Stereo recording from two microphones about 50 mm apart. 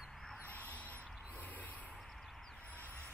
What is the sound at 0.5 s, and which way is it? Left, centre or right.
Owl, left.